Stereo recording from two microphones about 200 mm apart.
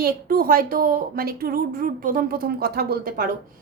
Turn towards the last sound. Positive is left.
turn(degrees=-45)  # may be behind; listen again after turning